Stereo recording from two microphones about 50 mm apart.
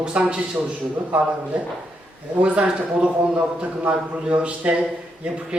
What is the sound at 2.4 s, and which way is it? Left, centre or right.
Speech, right.